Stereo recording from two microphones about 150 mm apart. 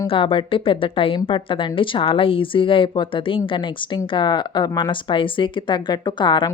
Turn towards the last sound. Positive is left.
turn(degrees=30)  # may be behind; listen again after turning